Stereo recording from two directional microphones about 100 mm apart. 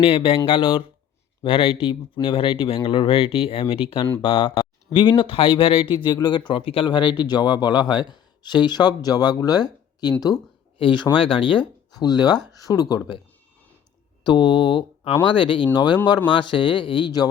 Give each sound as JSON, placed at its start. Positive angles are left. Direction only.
{"t": 0.0, "sound": "speech", "side_deg": 70}
{"t": 10.8, "sound": "speech", "side_deg": 55}
{"t": 14.3, "sound": "speech", "side_deg": 50}